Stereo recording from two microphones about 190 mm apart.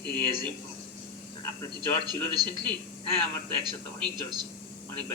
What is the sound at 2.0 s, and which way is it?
Speech, 20° right (ahead or behind).